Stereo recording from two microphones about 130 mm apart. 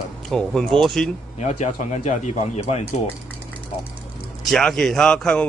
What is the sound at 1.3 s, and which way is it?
Speech, 65° left (ahead or behind).